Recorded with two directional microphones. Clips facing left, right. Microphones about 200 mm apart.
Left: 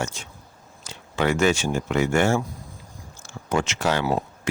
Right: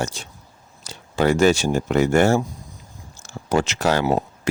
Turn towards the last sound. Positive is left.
turn(degrees=-40)  # may be behind; listen again after turning